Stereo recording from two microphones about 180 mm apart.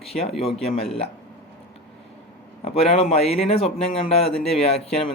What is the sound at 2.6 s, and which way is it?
Speech, 35° left (ahead or behind).